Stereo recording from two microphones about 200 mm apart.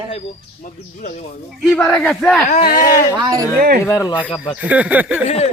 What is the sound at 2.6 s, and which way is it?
Speech, 45° left (ahead or behind).